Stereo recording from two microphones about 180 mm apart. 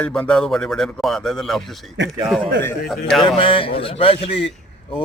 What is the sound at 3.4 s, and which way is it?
Speech, 30° left (ahead or behind).